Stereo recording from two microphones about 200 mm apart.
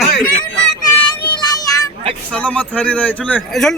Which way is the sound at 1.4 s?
20° left (ahead or behind).